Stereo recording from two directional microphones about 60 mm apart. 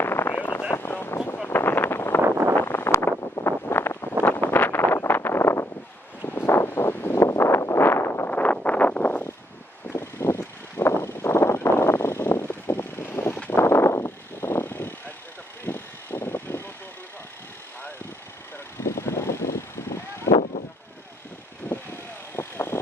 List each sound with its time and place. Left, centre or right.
0.0 s a sound: left
0.3 s a sound: left
0.7 s vehicle: left
4.2 s wind noise: left
6.2 s vehicle: left
7.2 s vehicle: left
7.9 s a sound: left
8.3 s vehicle: left
9.9 s vehicle: left
13.6 s vehicle: left
18.8 s vehicle: left
21.6 s vehicle: left
22.4 s vehicle: left